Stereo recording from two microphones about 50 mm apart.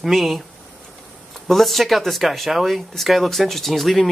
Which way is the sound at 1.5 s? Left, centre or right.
Centre.